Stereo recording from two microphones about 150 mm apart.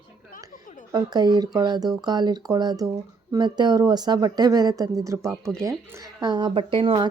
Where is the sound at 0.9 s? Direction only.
25° right (ahead or behind).